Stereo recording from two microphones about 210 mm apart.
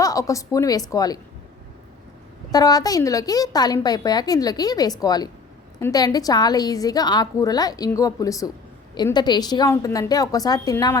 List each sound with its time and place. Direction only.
0.0 s a woman's voice: 15° left (ahead or behind)
2.5 s a woman's voice: 20° left (ahead or behind)